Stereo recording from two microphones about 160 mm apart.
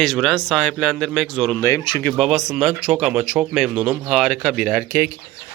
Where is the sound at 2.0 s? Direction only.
5° left (ahead or behind).